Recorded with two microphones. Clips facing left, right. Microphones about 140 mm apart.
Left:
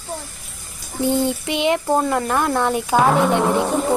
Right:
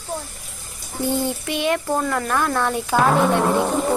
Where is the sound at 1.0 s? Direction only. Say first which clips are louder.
Left 3 dB; 20° left (ahead or behind).